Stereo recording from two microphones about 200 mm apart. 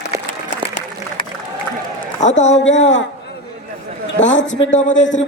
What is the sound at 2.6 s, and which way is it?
Speech, 70° left (ahead or behind).